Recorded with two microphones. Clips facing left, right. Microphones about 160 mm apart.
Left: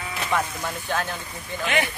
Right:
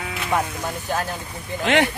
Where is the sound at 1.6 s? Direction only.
65° right (ahead or behind).